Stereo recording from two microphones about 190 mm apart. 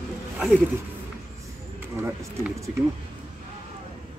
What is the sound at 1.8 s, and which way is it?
Speech, 10° right (ahead or behind).